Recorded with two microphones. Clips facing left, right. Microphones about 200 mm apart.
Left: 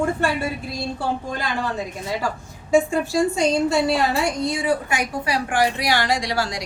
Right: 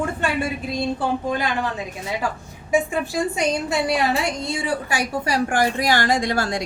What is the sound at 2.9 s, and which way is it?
A woman's voice, 20° right (ahead or behind).